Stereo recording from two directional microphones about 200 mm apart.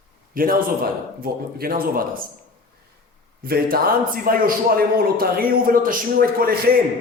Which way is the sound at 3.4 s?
50° right (ahead or behind).